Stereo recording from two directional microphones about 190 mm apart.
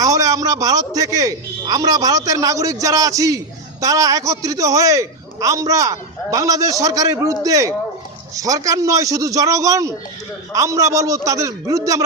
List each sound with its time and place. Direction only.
0.0 s a man's voice: 20° right (ahead or behind)